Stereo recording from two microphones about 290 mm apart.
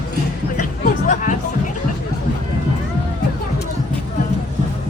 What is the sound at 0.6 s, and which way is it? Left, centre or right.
Music, left.